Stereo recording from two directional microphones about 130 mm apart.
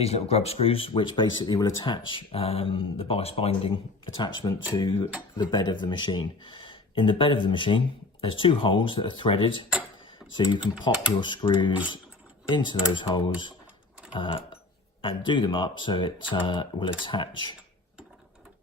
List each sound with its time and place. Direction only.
0.0 s speech: 55° left (ahead or behind); by 17.6 s 35° left (ahead or behind)